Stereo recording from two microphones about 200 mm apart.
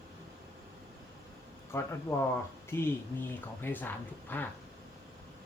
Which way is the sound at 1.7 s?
15° left (ahead or behind).